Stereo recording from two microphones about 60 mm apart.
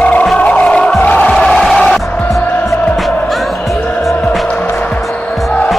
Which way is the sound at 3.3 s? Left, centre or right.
Centre.